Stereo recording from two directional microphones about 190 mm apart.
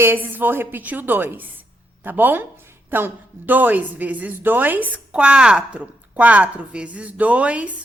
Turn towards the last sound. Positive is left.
turn(degrees=-5)  # may be behind; listen again after turning